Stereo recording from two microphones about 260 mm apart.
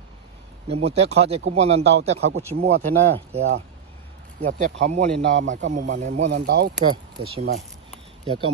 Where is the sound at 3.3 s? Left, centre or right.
Right.